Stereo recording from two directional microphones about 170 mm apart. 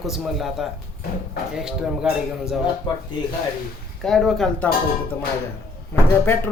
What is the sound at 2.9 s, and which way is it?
Speech, 25° left (ahead or behind).